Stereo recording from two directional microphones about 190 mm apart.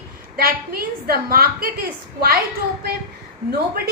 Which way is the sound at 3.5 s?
55° right (ahead or behind).